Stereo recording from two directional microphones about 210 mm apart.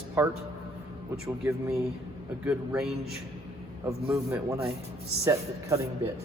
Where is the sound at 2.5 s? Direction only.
Centre (ahead or behind).